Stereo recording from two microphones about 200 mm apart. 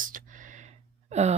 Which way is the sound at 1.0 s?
35° right (ahead or behind).